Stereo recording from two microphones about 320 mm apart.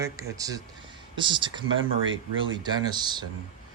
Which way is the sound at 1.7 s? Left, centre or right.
Right.